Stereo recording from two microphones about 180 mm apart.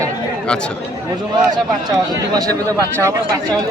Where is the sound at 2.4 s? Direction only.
20° right (ahead or behind).